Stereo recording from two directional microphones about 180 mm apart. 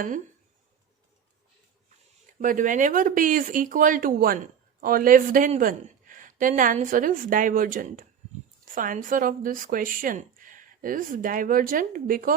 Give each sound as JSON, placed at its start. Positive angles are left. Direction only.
{"t": 2.4, "sound": "speech", "side_deg": -45}